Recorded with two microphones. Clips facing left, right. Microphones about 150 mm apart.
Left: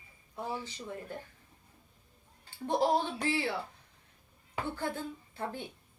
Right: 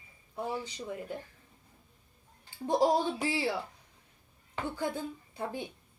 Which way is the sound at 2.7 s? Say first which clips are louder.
Right 2 dB; 15° right (ahead or behind).